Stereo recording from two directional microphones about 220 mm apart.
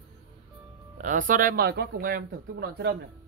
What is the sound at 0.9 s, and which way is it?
Speech, 35° right (ahead or behind).